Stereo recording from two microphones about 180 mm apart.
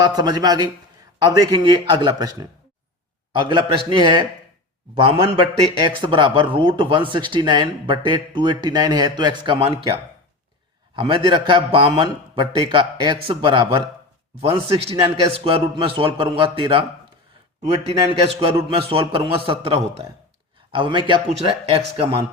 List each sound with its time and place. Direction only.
0.0 s a man's voice: 20° right (ahead or behind)
10.9 s a man's voice: 25° right (ahead or behind)